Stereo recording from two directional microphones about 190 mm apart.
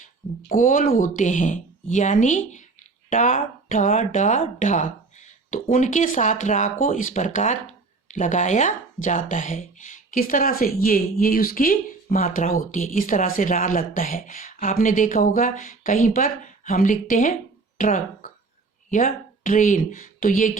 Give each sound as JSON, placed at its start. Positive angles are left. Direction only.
{"t": 0.4, "sound": "speech", "side_deg": 45}